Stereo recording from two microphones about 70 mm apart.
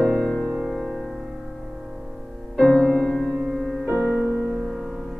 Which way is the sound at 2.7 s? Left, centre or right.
Centre.